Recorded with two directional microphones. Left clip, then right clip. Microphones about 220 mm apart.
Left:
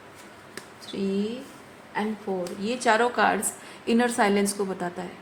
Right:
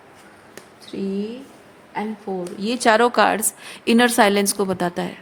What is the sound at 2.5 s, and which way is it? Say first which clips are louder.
A woman's voice: right 6 dB; 45° right (ahead or behind).